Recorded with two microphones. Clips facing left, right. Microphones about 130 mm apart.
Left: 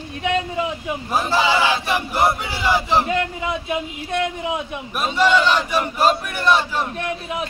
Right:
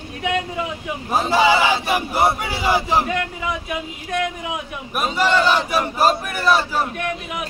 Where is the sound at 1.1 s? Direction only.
20° right (ahead or behind).